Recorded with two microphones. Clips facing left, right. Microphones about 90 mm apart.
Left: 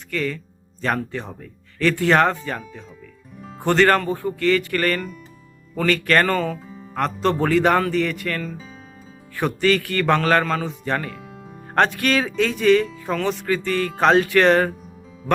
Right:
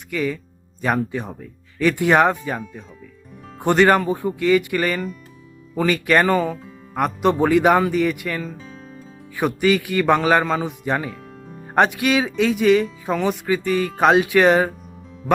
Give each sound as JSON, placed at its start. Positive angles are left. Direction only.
{"t": 0.1, "sound": "speech", "side_deg": -10}
{"t": 3.6, "sound": "speech", "side_deg": -15}